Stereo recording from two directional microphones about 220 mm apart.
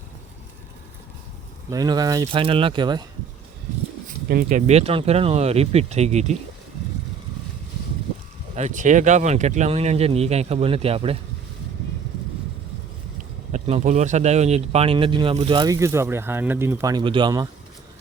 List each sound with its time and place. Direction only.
1.7 s speech: 15° right (ahead or behind)
4.3 s speech: 40° right (ahead or behind)
8.5 s speech: 35° right (ahead or behind)
13.5 s speech: 30° right (ahead or behind)